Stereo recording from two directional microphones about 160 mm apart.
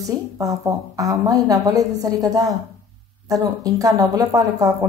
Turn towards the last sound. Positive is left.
turn(degrees=-20)  # may be behind; listen again after turning